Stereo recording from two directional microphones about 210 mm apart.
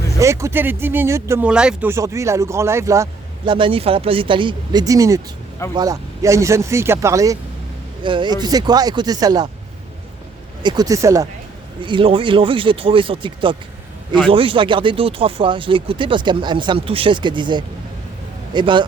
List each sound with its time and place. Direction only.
0.2 s speech: 15° right (ahead or behind)
10.6 s speech: 20° right (ahead or behind)